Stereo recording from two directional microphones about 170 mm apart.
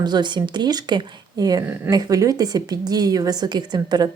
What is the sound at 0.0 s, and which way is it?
A woman's voice, 25° right (ahead or behind).